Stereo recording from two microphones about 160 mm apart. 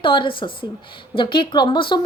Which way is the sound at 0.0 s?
30° left (ahead or behind).